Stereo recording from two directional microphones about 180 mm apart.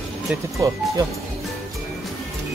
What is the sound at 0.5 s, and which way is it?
Speech, 20° right (ahead or behind).